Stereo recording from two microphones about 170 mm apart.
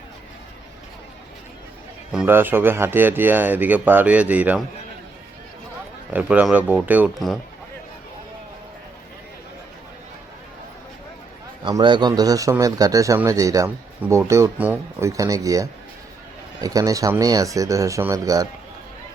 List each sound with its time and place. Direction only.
2.1 s speech: 10° right (ahead or behind)
6.1 s speech: 5° right (ahead or behind)
11.6 s speech: 25° right (ahead or behind)